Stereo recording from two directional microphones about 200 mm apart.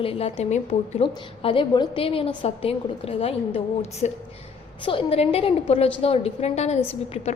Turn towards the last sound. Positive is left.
turn(degrees=35)  # may be behind; listen again after turning